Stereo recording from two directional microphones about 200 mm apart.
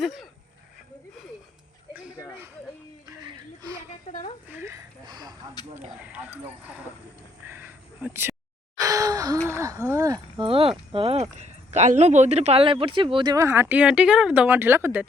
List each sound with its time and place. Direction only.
0.0 s speech: centre (ahead or behind)
3.1 s a sound: 20° right (ahead or behind)
4.1 s speech: 35° left (ahead or behind)
4.4 s speech: 15° right (ahead or behind)
6.0 s speech: 5° right (ahead or behind)
7.4 s a sound: 10° right (ahead or behind)
8.8 s gasp: 15° right (ahead or behind)
9.5 s speech: 15° right (ahead or behind)